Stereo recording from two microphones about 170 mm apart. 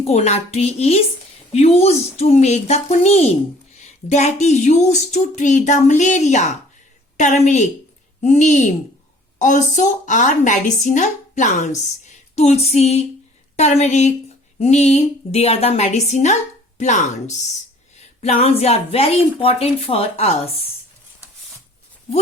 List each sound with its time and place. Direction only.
0.0 s a woman's voice: 40° left (ahead or behind)